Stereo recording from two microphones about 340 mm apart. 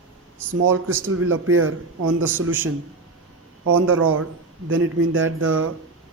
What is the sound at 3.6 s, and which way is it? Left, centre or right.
Speech, right.